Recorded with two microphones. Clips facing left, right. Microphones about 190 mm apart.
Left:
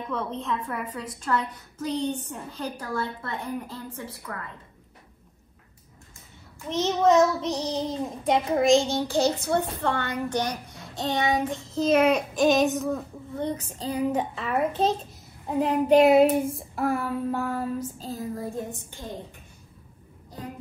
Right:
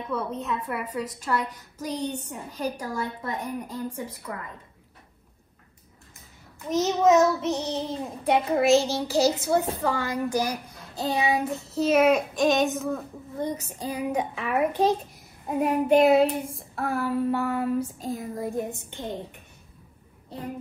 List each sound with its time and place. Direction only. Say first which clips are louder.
0.1 s a woman's voice: right 1 dB; 10° right (ahead or behind)
6.7 s a woman's voice: right 1 dB; 5° right (ahead or behind)
18.0 s a woman's voice: right 1 dB; 15° right (ahead or behind)